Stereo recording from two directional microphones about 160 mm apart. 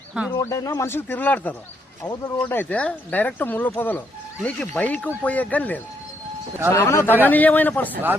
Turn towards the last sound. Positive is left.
turn(degrees=10)  # may be behind; listen again after turning